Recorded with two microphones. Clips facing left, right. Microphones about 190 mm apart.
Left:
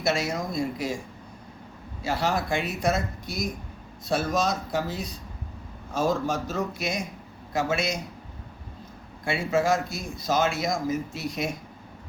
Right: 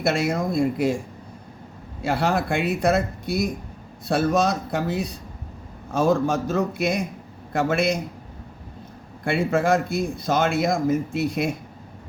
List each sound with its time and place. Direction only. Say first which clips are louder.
0.0 s a man's voice: right 4 dB; 55° right (ahead or behind)
2.0 s a man's voice: right 4 dB; 60° right (ahead or behind)
9.2 s a man's voice: right 3 dB; 55° right (ahead or behind)